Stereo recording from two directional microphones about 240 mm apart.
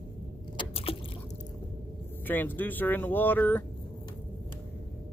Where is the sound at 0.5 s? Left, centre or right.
Left.